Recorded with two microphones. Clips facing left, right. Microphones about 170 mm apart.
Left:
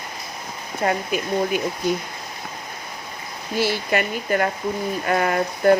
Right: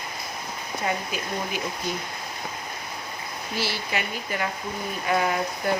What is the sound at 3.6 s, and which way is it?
Speech, 50° left (ahead or behind).